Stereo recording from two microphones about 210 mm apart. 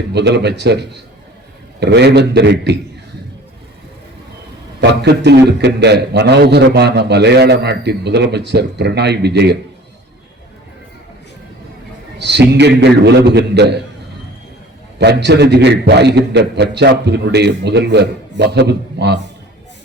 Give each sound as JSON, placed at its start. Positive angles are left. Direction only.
{"t": 0.1, "sound": "a man's voice", "side_deg": -55}
{"t": 4.8, "sound": "a man's voice", "side_deg": -55}
{"t": 12.2, "sound": "a man's voice", "side_deg": -55}
{"t": 14.9, "sound": "a man's voice", "side_deg": -55}